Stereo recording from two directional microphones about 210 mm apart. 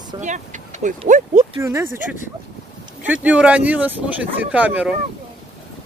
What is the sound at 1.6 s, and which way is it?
Speech, 10° right (ahead or behind).